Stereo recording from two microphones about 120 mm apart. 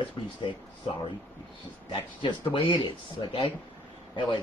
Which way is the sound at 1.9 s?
45° left (ahead or behind).